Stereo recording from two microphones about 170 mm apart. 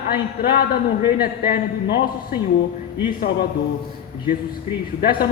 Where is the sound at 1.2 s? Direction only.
65° left (ahead or behind).